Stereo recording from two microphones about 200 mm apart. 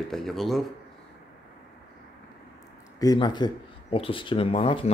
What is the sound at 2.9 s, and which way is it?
Speech, 20° left (ahead or behind).